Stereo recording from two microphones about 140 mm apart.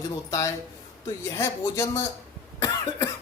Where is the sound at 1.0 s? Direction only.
20° left (ahead or behind).